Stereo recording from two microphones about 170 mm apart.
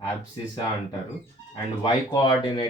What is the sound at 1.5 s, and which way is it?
Speech, 25° left (ahead or behind).